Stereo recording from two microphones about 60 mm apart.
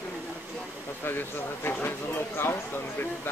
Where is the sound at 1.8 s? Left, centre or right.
Left.